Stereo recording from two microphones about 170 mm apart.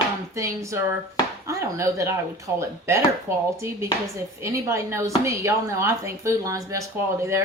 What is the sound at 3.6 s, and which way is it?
Speech, 15° right (ahead or behind).